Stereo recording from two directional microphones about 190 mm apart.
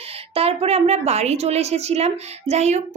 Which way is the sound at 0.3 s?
30° right (ahead or behind).